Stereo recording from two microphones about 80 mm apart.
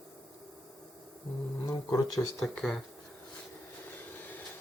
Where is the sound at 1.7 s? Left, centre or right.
Left.